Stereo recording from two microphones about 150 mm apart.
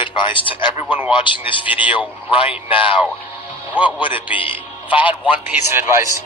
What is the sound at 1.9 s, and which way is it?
Speech, 35° left (ahead or behind).